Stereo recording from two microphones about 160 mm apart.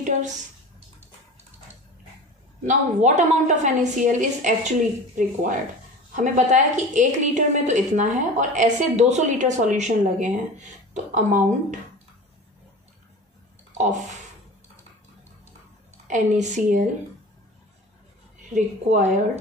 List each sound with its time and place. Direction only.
2.6 s a woman's voice: 50° right (ahead or behind)
13.7 s speech: 50° right (ahead or behind)
16.1 s a woman's voice: 50° right (ahead or behind)
18.5 s a woman's voice: 45° right (ahead or behind)